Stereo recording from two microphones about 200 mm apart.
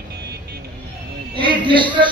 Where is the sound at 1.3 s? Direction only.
25° right (ahead or behind).